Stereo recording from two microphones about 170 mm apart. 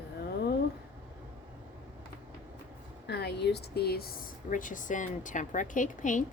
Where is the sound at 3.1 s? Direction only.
75° left (ahead or behind); by 6.2 s 50° left (ahead or behind).